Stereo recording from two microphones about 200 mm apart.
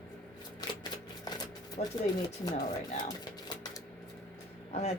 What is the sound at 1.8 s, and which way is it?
Speech, 35° left (ahead or behind).